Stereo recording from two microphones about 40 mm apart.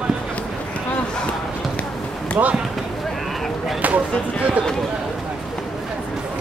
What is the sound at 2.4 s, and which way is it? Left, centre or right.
Speech, right.